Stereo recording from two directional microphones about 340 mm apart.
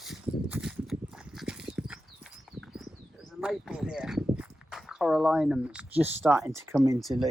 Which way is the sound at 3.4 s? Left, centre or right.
Centre.